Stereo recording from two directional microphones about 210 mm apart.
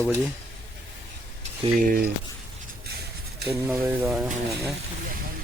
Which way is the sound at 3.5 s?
10° right (ahead or behind).